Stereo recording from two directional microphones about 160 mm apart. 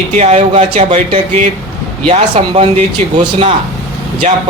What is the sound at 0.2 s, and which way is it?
Speech, 45° right (ahead or behind).